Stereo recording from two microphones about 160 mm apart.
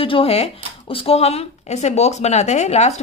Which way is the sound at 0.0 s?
35° left (ahead or behind).